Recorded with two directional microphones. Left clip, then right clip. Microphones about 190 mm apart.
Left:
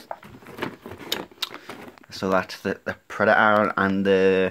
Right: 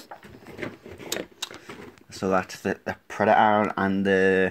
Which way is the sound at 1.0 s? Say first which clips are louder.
Left 3 dB; 5° left (ahead or behind).